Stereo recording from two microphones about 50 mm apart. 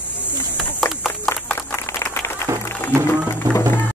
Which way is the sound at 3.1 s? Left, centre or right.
Left.